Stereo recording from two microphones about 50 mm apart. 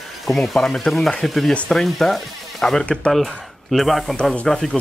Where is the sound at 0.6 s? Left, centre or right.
Centre.